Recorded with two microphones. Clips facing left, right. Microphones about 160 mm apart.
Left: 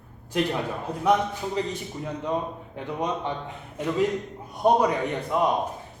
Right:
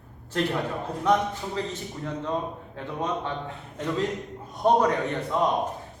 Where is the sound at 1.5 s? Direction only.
15° left (ahead or behind).